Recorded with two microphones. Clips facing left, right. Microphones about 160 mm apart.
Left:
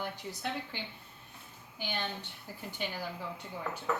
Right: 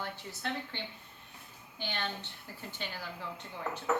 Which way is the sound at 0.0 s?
15° left (ahead or behind).